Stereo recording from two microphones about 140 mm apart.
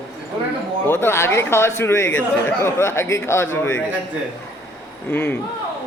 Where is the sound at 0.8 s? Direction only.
15° left (ahead or behind).